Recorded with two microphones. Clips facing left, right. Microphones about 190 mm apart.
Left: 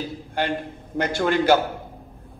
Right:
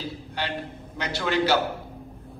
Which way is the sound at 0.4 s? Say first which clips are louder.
Left 6 dB; 50° left (ahead or behind).